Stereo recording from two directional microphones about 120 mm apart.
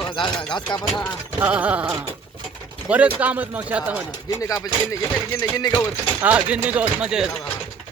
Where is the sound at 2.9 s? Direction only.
15° right (ahead or behind).